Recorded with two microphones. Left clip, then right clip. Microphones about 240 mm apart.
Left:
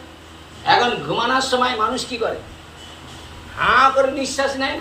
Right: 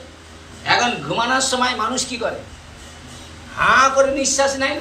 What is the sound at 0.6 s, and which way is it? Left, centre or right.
Speech, centre.